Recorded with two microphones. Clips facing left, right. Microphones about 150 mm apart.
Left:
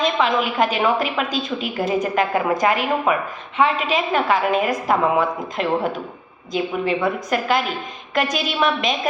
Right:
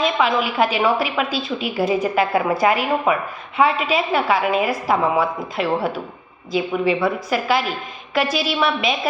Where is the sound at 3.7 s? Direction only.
40° left (ahead or behind).